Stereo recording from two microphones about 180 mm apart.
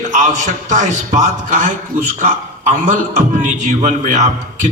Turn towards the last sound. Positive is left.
turn(degrees=-40)  # may be behind; listen again after turning